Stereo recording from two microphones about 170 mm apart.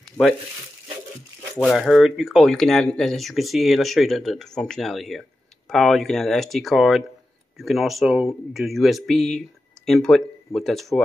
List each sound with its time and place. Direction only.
0.2 s speech: 20° left (ahead or behind)
1.6 s speech: centre (ahead or behind)